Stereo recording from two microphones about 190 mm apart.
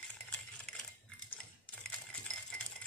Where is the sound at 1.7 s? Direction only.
5° left (ahead or behind).